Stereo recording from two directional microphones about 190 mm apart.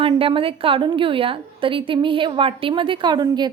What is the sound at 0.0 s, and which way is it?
A woman's voice, 30° right (ahead or behind).